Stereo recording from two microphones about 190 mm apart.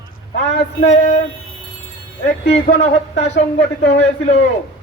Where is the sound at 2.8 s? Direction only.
35° left (ahead or behind).